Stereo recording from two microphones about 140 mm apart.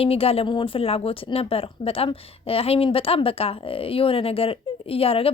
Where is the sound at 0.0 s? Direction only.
45° left (ahead or behind).